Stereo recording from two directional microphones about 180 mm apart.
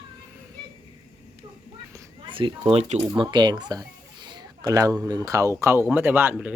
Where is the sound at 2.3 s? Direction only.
30° right (ahead or behind).